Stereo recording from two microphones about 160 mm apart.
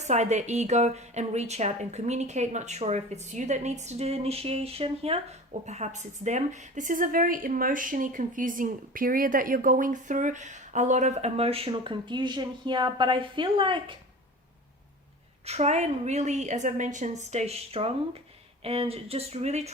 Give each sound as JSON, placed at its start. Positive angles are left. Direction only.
{"t": 0.0, "sound": "a woman's voice", "side_deg": -45}
{"t": 15.4, "sound": "a woman's voice", "side_deg": -40}